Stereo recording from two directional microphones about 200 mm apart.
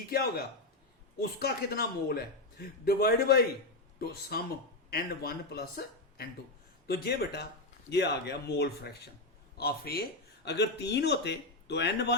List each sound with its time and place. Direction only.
0.1 s a man's voice: 50° left (ahead or behind)